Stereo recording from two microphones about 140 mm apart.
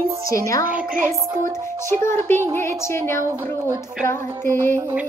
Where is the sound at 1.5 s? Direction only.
20° left (ahead or behind).